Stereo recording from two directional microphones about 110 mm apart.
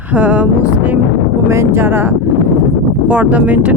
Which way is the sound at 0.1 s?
15° right (ahead or behind).